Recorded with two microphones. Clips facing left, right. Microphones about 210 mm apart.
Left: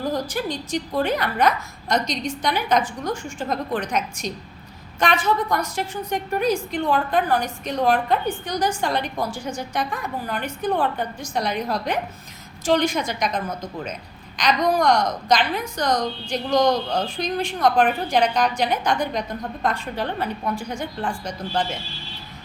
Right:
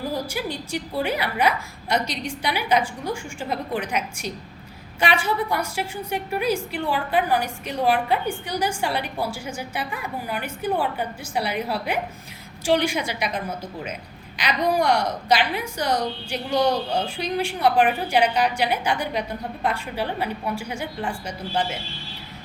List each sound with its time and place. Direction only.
0.1 s a woman's voice: 10° right (ahead or behind)